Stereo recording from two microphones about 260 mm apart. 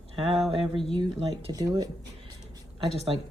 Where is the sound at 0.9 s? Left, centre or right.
Centre.